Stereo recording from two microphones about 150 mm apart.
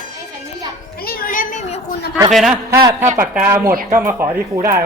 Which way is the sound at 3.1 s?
10° right (ahead or behind).